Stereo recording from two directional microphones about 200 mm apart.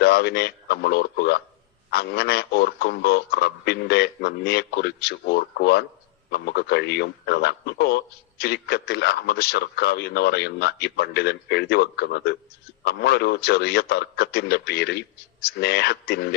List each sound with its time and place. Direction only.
0.0 s a man's voice: 55° left (ahead or behind)